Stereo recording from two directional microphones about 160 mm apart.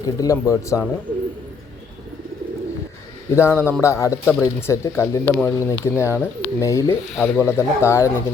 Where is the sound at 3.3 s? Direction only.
15° left (ahead or behind).